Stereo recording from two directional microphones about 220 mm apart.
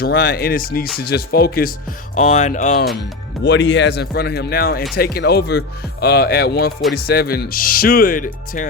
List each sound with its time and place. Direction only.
0.0 s speech: 45° left (ahead or behind)
2.1 s speech: 35° left (ahead or behind)
3.4 s speech: 50° left (ahead or behind)